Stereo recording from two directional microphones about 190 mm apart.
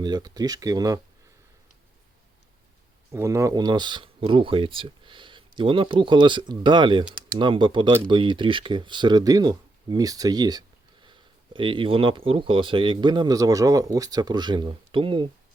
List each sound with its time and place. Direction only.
0.0 s speech: 20° right (ahead or behind)
3.1 s speech: 15° right (ahead or behind)